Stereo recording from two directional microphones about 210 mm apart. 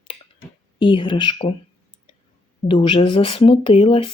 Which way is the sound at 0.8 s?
25° left (ahead or behind).